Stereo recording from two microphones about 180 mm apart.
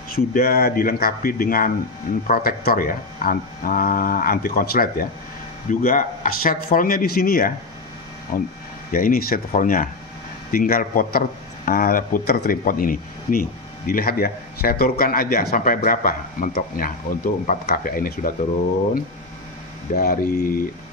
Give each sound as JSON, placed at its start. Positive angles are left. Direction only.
{"t": 0.1, "sound": "a man's voice", "side_deg": 55}
{"t": 20.0, "sound": "a man's voice", "side_deg": 55}